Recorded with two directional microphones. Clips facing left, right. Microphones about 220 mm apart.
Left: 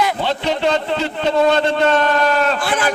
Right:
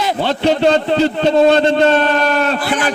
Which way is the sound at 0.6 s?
35° right (ahead or behind).